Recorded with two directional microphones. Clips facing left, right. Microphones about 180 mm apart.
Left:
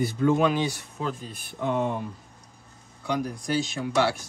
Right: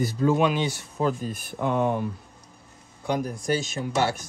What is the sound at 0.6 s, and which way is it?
Speech, 25° right (ahead or behind).